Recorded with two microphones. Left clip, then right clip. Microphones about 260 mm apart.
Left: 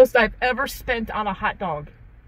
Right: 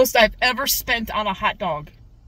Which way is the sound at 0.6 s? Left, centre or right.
Right.